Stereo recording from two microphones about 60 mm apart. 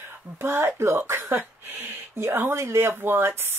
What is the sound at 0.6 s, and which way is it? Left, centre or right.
Speech, right.